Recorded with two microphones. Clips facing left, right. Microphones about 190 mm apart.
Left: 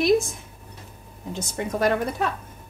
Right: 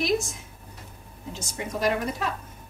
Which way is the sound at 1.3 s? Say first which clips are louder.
Left 5 dB; 55° left (ahead or behind).